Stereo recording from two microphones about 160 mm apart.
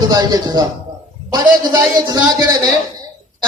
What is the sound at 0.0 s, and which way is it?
A man's voice, 25° right (ahead or behind).